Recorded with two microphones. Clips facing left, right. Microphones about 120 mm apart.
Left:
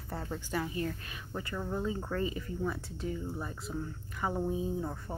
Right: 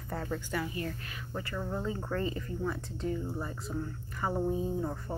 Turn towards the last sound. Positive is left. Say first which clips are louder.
# right 2 dB
turn(degrees=0)  # may be behind; listen again after turning